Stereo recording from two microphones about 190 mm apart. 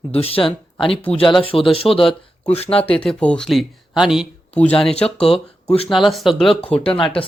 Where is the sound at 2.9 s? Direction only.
5° left (ahead or behind).